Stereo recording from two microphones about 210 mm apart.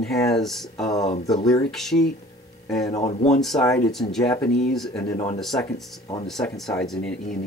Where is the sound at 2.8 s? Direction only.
15° left (ahead or behind).